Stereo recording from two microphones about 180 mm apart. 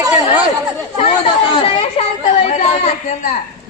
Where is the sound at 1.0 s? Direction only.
30° left (ahead or behind).